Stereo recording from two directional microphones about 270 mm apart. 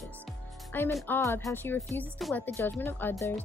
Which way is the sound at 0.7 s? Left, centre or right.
Centre.